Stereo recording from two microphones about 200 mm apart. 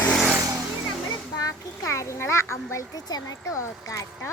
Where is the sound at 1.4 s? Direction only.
15° left (ahead or behind).